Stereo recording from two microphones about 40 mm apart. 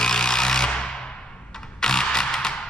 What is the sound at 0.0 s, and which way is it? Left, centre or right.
Tools, centre.